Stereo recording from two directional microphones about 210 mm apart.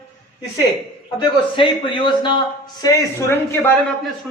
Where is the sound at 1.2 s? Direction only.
25° left (ahead or behind).